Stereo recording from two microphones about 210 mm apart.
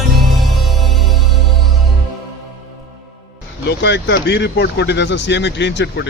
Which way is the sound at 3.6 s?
55° left (ahead or behind).